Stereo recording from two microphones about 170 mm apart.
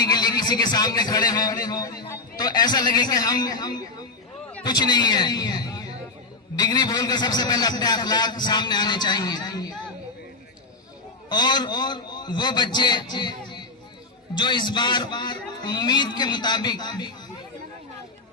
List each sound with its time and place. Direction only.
0.0 s a man's voice: 25° left (ahead or behind)
11.3 s a man's voice: 25° left (ahead or behind)